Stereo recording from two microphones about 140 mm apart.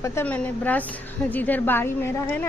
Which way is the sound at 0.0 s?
15° left (ahead or behind).